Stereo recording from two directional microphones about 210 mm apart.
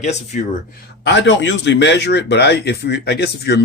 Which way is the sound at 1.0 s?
55° left (ahead or behind).